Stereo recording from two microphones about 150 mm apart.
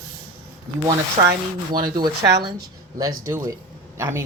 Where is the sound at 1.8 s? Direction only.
30° right (ahead or behind).